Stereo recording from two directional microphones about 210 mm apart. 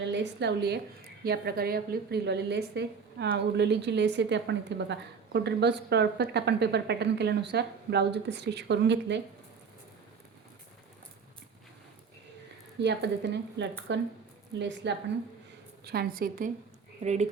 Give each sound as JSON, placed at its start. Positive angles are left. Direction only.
{"t": 0.0, "sound": "a woman's voice", "side_deg": -55}
{"t": 12.8, "sound": "a woman's voice", "side_deg": -55}